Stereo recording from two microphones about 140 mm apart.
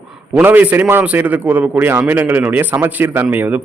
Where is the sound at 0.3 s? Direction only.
10° right (ahead or behind).